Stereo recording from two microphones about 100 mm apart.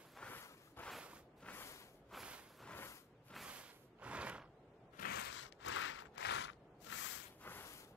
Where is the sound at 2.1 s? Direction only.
Centre (ahead or behind).